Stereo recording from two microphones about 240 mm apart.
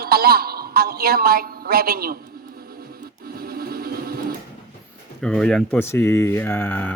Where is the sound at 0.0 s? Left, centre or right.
Right.